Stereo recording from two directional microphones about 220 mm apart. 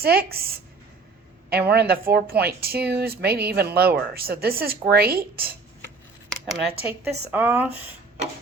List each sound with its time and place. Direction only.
0.0 s speech: 45° right (ahead or behind)
1.5 s speech: 45° right (ahead or behind)
6.3 s speech: centre (ahead or behind)